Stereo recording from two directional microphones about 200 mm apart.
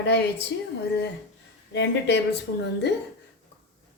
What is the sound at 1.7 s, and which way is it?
Speech, 60° left (ahead or behind).